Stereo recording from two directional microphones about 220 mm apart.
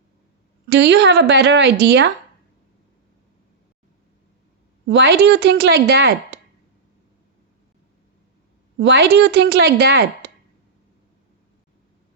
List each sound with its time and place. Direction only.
0.7 s speech: 50° right (ahead or behind)
4.9 s speech: 50° right (ahead or behind)
8.8 s speech: 50° right (ahead or behind)